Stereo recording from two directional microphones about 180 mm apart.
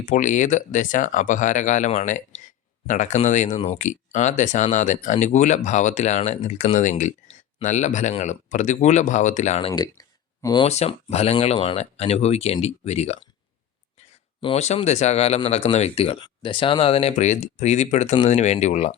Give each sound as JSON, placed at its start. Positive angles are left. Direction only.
{"t": 0.0, "sound": "speech", "side_deg": 45}
{"t": 9.8, "sound": "a sound", "side_deg": 20}
{"t": 10.7, "sound": "speech", "side_deg": 35}
{"t": 14.4, "sound": "speech", "side_deg": 40}